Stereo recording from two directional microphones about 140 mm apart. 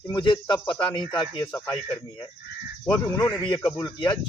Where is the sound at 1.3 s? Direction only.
25° left (ahead or behind).